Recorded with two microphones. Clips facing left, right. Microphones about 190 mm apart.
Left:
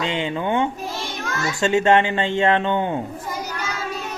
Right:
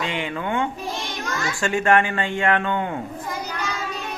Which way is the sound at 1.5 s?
20° left (ahead or behind).